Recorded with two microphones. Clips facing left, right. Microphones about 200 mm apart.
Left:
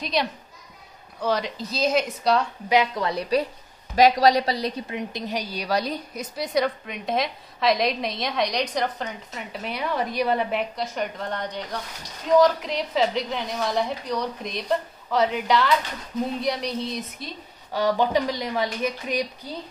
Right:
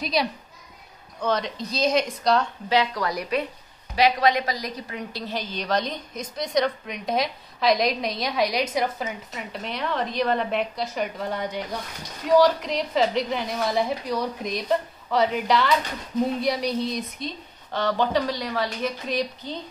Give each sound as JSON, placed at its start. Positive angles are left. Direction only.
{"t": 0.0, "sound": "a woman's voice", "side_deg": 0}
{"t": 2.7, "sound": "a woman's voice", "side_deg": 20}
{"t": 17.7, "sound": "a woman's voice", "side_deg": 15}